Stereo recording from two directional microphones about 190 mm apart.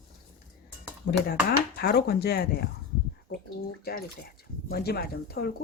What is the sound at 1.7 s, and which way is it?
Speech, 55° left (ahead or behind).